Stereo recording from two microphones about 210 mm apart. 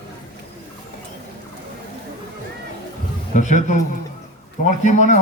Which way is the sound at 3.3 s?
35° left (ahead or behind).